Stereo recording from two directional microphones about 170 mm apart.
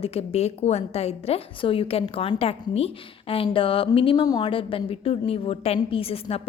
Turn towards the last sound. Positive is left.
turn(degrees=35)  # may be behind; listen again after turning